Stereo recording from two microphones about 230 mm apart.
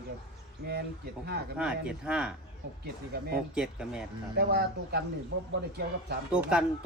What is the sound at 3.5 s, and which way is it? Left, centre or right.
Speech, centre.